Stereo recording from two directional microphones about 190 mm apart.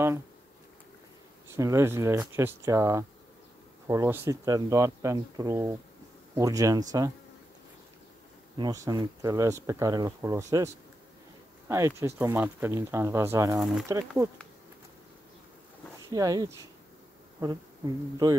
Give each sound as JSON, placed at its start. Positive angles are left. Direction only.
{"t": 1.6, "sound": "speech", "side_deg": -15}
{"t": 8.5, "sound": "speech", "side_deg": -20}
{"t": 16.1, "sound": "speech", "side_deg": -20}